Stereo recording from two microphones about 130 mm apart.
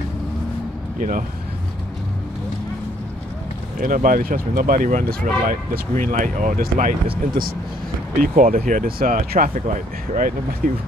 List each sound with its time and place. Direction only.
0.9 s speech: 90° right
3.8 s speech: 90° right
8.2 s speech: 90° right